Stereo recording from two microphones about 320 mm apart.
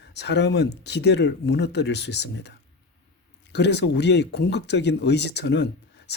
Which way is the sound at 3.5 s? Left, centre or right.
Left.